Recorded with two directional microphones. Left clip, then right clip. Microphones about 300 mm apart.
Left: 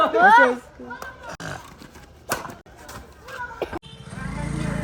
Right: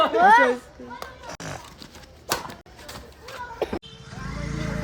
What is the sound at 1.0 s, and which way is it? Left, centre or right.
Music, right.